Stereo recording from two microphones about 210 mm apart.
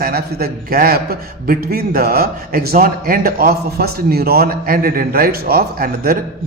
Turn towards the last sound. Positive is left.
turn(degrees=-45)  # may be behind; listen again after turning